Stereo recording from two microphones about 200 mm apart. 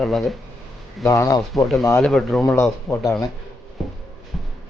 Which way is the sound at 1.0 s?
15° left (ahead or behind).